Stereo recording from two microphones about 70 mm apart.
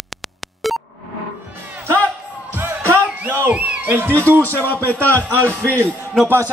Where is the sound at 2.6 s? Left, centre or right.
Right.